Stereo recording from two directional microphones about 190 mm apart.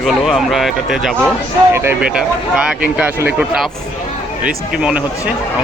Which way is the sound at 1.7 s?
10° right (ahead or behind).